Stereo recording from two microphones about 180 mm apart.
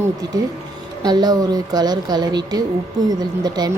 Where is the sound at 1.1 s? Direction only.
20° right (ahead or behind).